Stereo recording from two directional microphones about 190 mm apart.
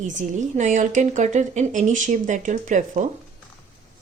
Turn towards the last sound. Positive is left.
turn(degrees=-40)  # may be behind; listen again after turning